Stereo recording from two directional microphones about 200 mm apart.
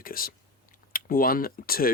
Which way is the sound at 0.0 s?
45° left (ahead or behind).